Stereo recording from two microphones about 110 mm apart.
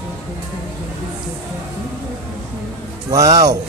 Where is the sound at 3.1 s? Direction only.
35° right (ahead or behind).